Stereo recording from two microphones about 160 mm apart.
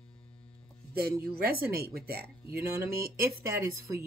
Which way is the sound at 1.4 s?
70° right (ahead or behind).